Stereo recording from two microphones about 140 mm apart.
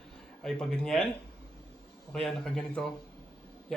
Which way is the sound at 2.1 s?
5° left (ahead or behind).